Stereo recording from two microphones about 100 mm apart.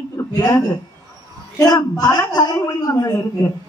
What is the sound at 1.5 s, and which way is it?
A man's voice, 40° left (ahead or behind).